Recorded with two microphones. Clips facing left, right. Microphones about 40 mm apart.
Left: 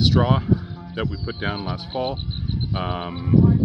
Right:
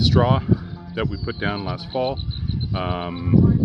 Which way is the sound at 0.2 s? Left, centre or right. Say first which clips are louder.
Right 1 dB; centre.